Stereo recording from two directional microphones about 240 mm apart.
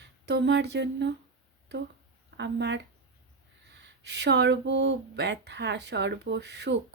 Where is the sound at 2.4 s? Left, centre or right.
Right.